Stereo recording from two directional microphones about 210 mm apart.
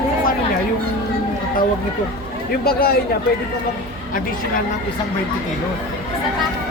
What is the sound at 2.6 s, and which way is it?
Speech, 45° left (ahead or behind).